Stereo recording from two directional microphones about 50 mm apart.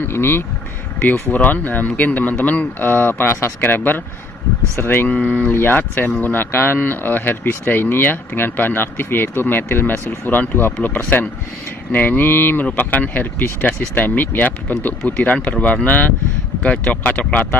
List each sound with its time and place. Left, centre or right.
0.1 s speech: left
1.3 s speech: left
2.8 s speech: left
5.1 s speech: left
5.5 s speech: left
5.8 s speech: left
6.3 s speech: left